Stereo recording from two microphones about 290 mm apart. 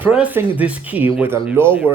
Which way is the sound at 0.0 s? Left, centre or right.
Centre.